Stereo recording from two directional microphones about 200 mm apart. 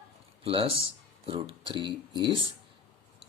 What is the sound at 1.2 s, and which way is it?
Speech, 25° right (ahead or behind).